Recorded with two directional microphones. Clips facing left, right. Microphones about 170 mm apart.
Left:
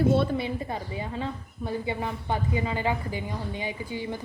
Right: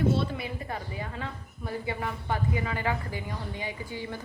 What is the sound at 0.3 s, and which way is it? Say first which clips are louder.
A woman's voice: left 5 dB; 25° left (ahead or behind).